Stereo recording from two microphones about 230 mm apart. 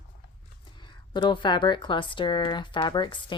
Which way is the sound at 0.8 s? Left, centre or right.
Centre.